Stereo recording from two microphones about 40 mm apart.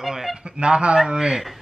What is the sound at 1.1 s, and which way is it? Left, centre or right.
Speech, centre.